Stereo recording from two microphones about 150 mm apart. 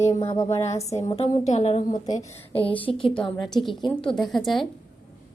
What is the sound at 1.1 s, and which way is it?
Speech, 45° left (ahead or behind).